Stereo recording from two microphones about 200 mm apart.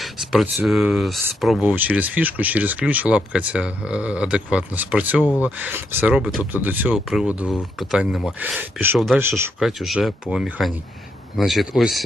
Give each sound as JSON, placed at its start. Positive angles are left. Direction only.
{"t": 0.0, "sound": "speech", "side_deg": 0}